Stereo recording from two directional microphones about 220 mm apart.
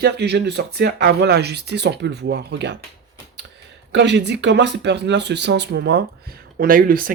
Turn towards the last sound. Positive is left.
turn(degrees=-40)  # may be behind; listen again after turning